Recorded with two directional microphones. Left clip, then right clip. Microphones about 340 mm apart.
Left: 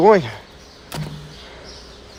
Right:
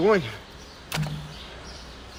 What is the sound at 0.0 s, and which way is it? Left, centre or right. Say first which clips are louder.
Speech: left 8 dB; centre.